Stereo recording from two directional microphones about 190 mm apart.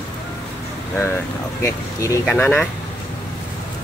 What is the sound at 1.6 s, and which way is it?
Speech, 15° left (ahead or behind).